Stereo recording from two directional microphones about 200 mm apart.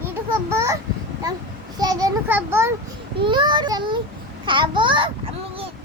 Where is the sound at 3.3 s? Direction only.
20° right (ahead or behind).